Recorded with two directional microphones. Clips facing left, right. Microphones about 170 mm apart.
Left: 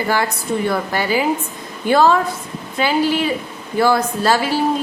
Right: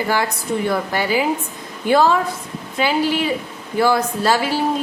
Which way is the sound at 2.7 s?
15° right (ahead or behind).